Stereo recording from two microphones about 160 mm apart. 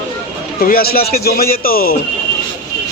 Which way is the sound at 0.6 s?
70° left (ahead or behind).